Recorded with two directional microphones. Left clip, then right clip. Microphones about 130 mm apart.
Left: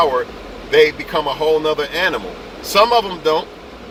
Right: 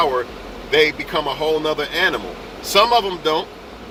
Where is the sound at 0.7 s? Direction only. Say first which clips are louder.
Left 3 dB; 30° left (ahead or behind).